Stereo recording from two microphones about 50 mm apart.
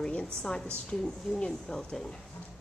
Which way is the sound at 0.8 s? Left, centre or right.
Centre.